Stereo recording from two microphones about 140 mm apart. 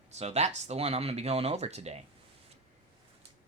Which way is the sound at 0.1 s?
50° right (ahead or behind).